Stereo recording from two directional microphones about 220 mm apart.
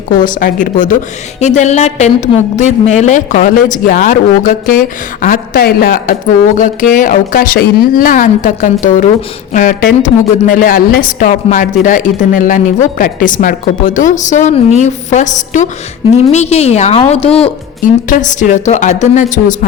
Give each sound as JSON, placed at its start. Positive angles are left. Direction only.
{"t": 0.2, "sound": "a woman's voice", "side_deg": 35}